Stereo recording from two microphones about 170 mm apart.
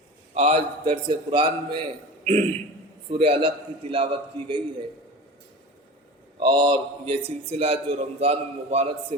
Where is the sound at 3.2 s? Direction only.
30° right (ahead or behind).